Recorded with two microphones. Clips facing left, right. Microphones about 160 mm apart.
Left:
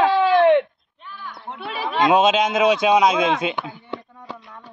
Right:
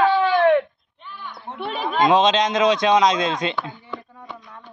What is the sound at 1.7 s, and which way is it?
Speech, 5° left (ahead or behind).